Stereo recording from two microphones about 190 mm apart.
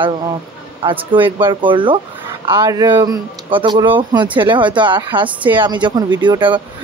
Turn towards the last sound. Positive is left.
turn(degrees=-25)  # may be behind; listen again after turning